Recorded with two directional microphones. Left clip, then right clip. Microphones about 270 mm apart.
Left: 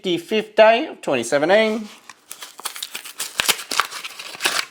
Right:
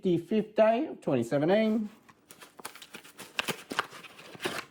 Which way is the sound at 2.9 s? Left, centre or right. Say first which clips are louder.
Left 15 dB; centre.